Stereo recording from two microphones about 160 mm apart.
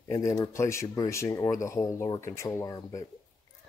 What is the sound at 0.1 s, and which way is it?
A man's voice, 20° left (ahead or behind).